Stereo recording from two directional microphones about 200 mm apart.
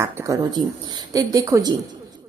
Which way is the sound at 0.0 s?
15° right (ahead or behind).